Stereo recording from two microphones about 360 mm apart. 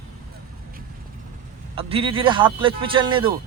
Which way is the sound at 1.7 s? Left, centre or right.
Centre.